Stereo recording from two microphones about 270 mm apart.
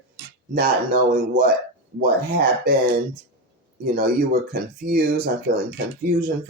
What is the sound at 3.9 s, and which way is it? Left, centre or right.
Speech, right.